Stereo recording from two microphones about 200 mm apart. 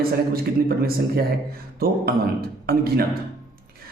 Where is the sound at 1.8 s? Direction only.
50° right (ahead or behind).